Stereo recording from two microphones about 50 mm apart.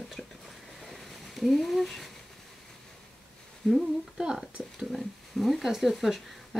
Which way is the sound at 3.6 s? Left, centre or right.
Centre.